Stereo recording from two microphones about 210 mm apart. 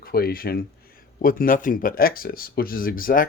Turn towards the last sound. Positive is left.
turn(degrees=40)  # may be behind; listen again after turning